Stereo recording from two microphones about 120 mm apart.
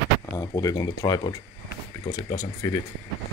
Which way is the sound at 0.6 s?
30° left (ahead or behind).